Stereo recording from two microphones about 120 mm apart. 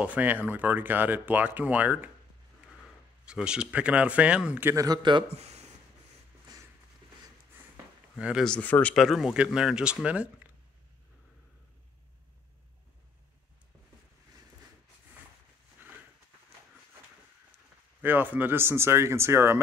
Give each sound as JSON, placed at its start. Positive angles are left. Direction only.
{"t": 0.0, "sound": "speech", "side_deg": -15}
{"t": 3.3, "sound": "speech", "side_deg": -5}
{"t": 4.7, "sound": "a man's voice", "side_deg": -35}
{"t": 5.3, "sound": "a sound", "side_deg": -65}
{"t": 8.2, "sound": "speech", "side_deg": -10}
{"t": 8.5, "sound": "speech", "side_deg": 10}
{"t": 8.9, "sound": "speech", "side_deg": 0}
{"t": 18.0, "sound": "speech", "side_deg": -15}